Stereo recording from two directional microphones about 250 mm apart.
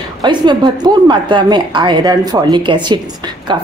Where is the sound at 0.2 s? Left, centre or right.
Centre.